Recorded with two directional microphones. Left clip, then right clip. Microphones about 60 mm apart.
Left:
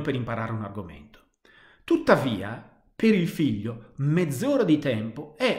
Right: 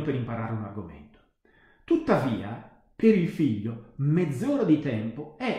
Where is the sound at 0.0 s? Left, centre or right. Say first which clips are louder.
Left 2 dB; left.